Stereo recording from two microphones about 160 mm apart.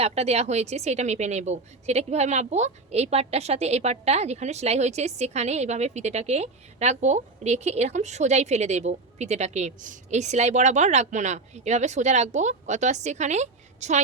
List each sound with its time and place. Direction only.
0.0 s a woman's voice: 40° right (ahead or behind)